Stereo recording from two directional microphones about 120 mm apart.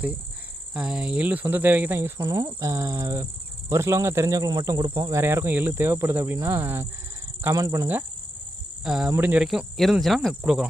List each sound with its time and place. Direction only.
0.7 s speech: 10° right (ahead or behind); by 5.2 s 35° right (ahead or behind)
5.2 s speech: 20° right (ahead or behind)
8.8 s speech: 5° right (ahead or behind)
9.0 s speech: 15° right (ahead or behind)
9.4 s cricket: 5° right (ahead or behind)